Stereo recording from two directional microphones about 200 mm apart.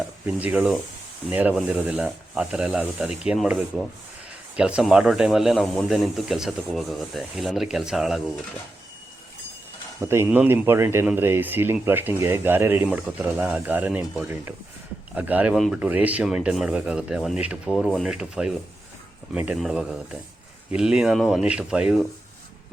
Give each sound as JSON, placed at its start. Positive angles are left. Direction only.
{"t": 0.3, "sound": "speech", "side_deg": -5}
{"t": 10.0, "sound": "speech", "side_deg": -15}